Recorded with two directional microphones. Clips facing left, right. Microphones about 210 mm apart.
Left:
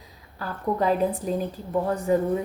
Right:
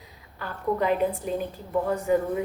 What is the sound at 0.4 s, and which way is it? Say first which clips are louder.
Speech: left 1 dB; 35° left (ahead or behind).